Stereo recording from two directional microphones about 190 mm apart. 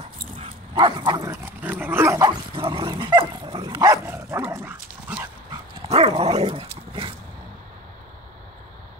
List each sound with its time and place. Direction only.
0.4 s dog: 25° right (ahead or behind); by 5.3 s 10° right (ahead or behind)
5.5 s dog: 30° right (ahead or behind)